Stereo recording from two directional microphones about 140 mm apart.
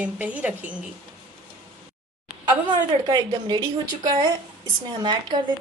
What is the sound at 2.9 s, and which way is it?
A woman's voice, 30° right (ahead or behind).